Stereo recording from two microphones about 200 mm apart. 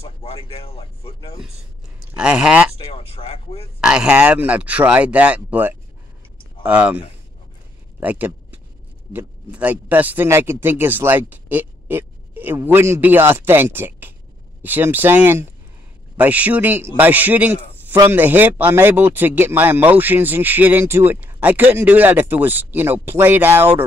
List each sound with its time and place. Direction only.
0.0 s speech: 30° left (ahead or behind)
2.1 s speech: 5° right (ahead or behind)
2.8 s speech: 30° left (ahead or behind)
3.8 s a man's voice: 5° right (ahead or behind)
8.0 s a sound: 10° right (ahead or behind)
9.1 s a man's voice: 5° right (ahead or behind)